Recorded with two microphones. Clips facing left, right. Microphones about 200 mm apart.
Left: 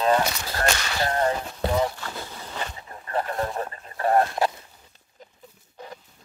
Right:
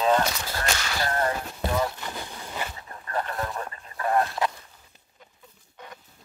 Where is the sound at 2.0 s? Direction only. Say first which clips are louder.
Even; 15° right (ahead or behind).